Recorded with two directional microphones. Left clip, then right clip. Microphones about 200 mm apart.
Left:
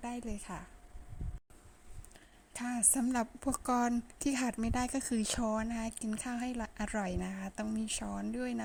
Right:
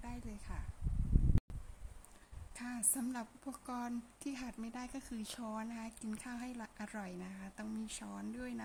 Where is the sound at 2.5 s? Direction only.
35° left (ahead or behind).